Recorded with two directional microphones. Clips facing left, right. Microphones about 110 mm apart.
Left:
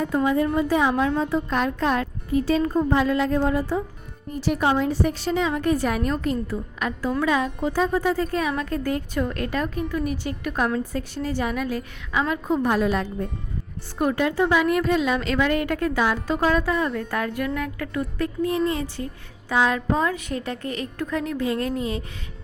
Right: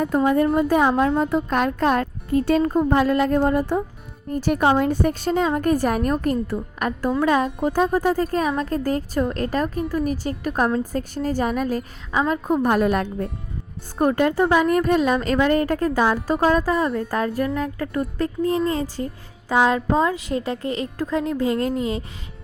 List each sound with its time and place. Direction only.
0.0 s a woman's voice: 50° right (ahead or behind); by 22.0 s 30° right (ahead or behind)